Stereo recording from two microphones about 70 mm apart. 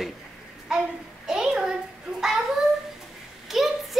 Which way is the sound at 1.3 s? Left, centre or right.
Centre.